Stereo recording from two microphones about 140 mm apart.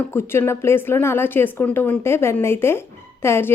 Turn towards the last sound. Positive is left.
turn(degrees=15)  # may be behind; listen again after turning